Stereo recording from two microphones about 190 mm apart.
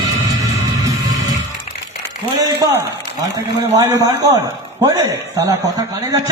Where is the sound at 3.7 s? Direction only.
15° right (ahead or behind).